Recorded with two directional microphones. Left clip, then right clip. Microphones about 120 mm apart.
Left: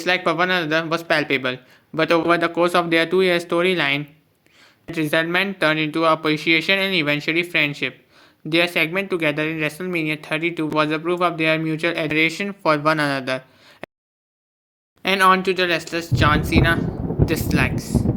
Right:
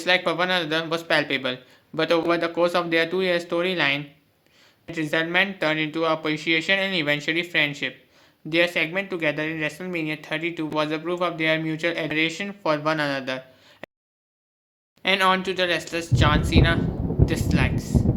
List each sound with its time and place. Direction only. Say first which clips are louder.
0.0 s speech: left 2 dB; 25° left (ahead or behind)
15.0 s speech: left 4 dB; 45° left (ahead or behind)
15.4 s speech: left 4 dB; 25° left (ahead or behind)
17.0 s a sound: left 3 dB; 5° left (ahead or behind)
17.2 s speech: left 5 dB; 25° left (ahead or behind)
17.7 s speech: left 2 dB; 15° left (ahead or behind)